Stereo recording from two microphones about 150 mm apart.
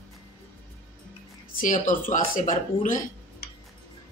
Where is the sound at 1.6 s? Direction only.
60° left (ahead or behind).